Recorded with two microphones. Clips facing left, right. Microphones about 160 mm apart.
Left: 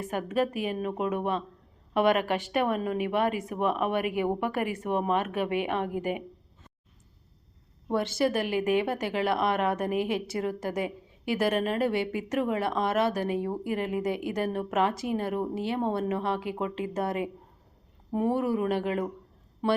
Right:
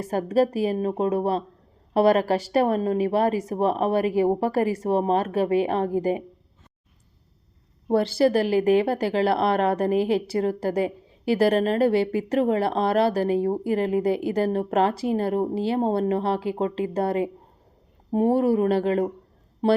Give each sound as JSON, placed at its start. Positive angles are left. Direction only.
{"t": 0.0, "sound": "speech", "side_deg": -35}
{"t": 7.9, "sound": "speech", "side_deg": -35}